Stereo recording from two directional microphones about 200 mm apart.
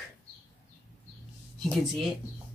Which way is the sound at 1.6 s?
Centre (ahead or behind).